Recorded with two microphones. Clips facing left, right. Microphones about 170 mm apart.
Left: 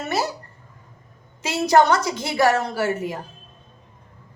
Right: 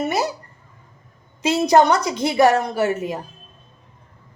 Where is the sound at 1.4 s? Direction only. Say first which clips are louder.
Right 2 dB; 20° right (ahead or behind).